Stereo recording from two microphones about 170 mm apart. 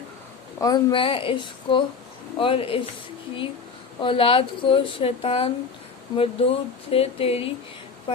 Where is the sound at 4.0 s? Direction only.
30° left (ahead or behind).